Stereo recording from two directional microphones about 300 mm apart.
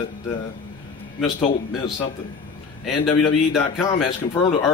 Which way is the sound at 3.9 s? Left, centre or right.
Centre.